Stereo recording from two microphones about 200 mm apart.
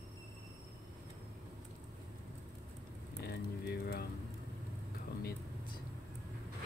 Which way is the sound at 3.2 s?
50° left (ahead or behind).